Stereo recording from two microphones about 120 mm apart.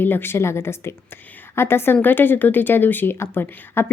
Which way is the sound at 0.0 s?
15° left (ahead or behind).